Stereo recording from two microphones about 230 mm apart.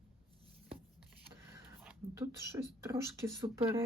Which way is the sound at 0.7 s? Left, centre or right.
Centre.